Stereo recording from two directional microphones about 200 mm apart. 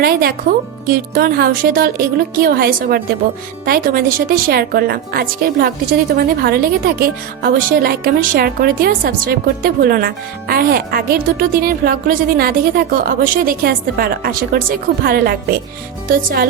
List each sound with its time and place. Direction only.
0.0 s a woman's voice: 50° right (ahead or behind)